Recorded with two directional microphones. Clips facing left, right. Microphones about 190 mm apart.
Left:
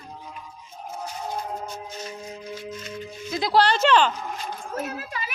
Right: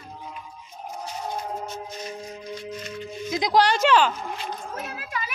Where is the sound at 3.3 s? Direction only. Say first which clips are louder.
Even; 15° right (ahead or behind).